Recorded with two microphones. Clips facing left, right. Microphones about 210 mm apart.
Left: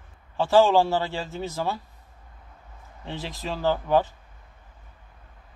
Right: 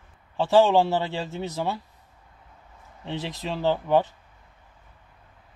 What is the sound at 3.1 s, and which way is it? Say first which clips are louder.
A man's voice: right 2 dB; 20° right (ahead or behind).